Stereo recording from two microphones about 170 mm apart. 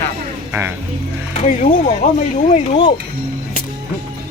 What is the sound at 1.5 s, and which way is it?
Speech, 45° left (ahead or behind).